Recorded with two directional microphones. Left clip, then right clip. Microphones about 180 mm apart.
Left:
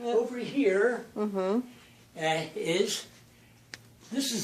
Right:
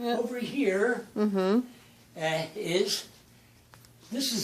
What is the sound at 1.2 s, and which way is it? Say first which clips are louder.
Speech: right 3 dB; 50° right (ahead or behind).